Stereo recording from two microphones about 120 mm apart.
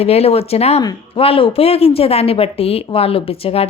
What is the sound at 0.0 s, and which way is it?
Speech, 60° left (ahead or behind).